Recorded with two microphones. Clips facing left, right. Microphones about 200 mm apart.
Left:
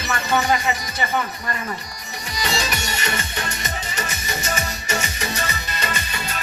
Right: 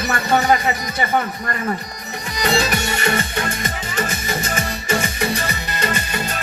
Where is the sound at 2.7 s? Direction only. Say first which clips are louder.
Right 6 dB; 55° right (ahead or behind).